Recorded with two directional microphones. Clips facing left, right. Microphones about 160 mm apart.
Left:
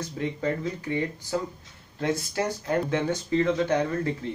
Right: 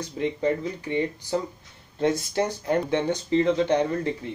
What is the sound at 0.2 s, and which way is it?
Speech, 20° right (ahead or behind).